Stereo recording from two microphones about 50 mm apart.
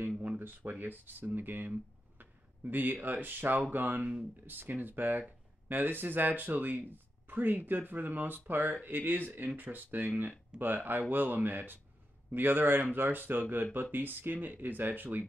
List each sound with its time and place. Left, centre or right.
0.4 s speech: right